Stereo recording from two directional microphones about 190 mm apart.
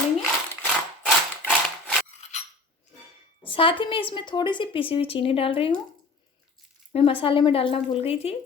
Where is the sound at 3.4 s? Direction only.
25° left (ahead or behind).